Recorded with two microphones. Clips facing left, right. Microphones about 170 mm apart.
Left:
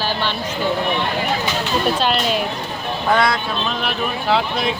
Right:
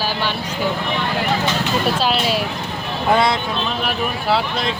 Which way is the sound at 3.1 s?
25° right (ahead or behind).